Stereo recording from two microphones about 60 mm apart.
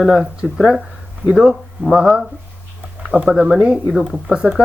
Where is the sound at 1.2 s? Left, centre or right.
Centre.